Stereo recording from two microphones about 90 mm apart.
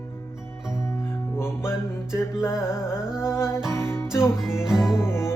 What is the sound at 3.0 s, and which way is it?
Music, 10° right (ahead or behind).